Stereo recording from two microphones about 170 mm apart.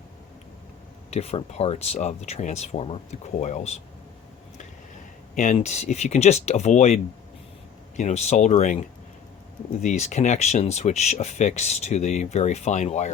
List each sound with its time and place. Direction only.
1.1 s speech: 40° left (ahead or behind)
5.3 s speech: 50° left (ahead or behind)